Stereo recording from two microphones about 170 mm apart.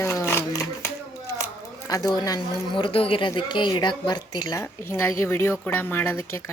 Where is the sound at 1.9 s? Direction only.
20° left (ahead or behind).